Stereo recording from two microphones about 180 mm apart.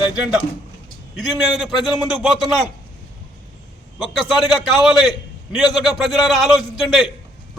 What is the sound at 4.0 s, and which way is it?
Speech, centre (ahead or behind).